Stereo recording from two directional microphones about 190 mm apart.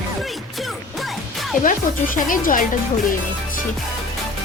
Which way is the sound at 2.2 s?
45° left (ahead or behind).